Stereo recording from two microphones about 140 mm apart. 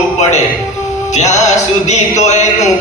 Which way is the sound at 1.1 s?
55° left (ahead or behind).